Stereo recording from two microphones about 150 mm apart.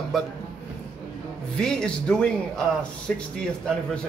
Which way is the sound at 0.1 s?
Centre (ahead or behind).